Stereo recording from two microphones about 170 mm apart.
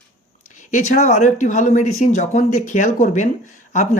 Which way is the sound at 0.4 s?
45° left (ahead or behind).